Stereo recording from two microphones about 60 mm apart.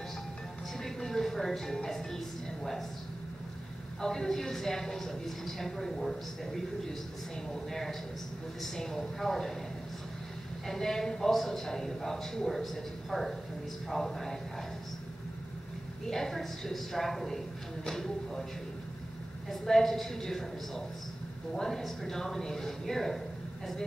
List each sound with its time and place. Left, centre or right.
0.7 s speech: centre
4.0 s a woman's voice: centre
10.7 s a woman's voice: centre
16.1 s a woman's voice: centre
19.5 s a woman's voice: centre